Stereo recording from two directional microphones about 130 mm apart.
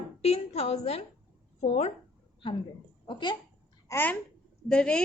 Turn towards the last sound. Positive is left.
turn(degrees=5)  # may be behind; listen again after turning